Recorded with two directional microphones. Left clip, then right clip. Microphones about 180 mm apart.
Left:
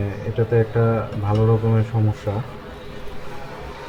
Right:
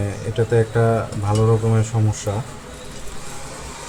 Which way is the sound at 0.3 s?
15° right (ahead or behind).